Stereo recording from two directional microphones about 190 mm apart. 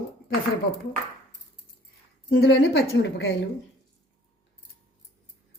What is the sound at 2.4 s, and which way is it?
Speech, 60° left (ahead or behind).